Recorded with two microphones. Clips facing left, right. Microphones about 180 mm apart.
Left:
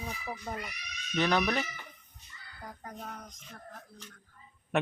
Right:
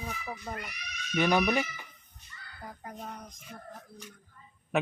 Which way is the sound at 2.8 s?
5° right (ahead or behind).